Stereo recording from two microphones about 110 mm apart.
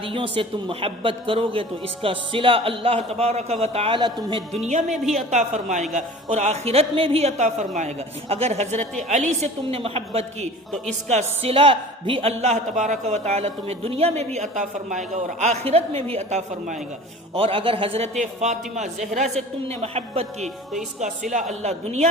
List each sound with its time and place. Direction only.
0.0 s a woman's voice: 55° right (ahead or behind)
4.6 s a man's voice: 90° right; by 10.5 s 65° right (ahead or behind)
11.1 s a woman's voice: 75° right (ahead or behind); by 12.3 s 55° right (ahead or behind)
12.3 s a man's voice: 90° right
17.3 s a woman's voice: 55° right (ahead or behind)
18.2 s a man's voice: 90° right; by 20.5 s 70° right (ahead or behind)
21.0 s a man's voice: 90° right